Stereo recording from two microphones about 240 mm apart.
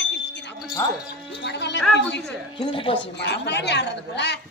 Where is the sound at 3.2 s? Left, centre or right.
Left.